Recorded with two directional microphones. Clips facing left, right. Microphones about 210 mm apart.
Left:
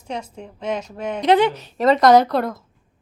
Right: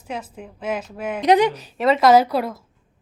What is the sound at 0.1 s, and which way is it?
A woman's voice, 5° right (ahead or behind).